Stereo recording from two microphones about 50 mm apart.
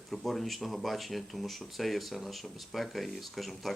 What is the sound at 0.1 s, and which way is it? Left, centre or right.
Speech, centre.